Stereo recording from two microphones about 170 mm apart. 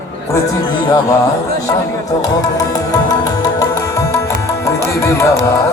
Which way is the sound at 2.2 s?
20° left (ahead or behind).